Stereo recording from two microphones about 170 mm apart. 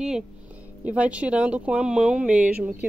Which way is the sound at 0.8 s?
5° right (ahead or behind).